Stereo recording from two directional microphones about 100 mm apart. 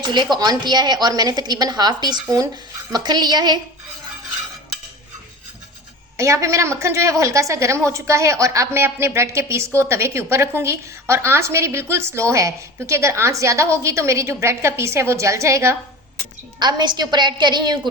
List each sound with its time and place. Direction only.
0.0 s a woman's voice: 50° right (ahead or behind)
6.1 s a woman's voice: 30° right (ahead or behind)
16.6 s a woman's voice: 45° right (ahead or behind)